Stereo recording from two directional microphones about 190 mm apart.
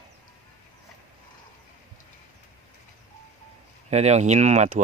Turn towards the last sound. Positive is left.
turn(degrees=-40)  # may be behind; listen again after turning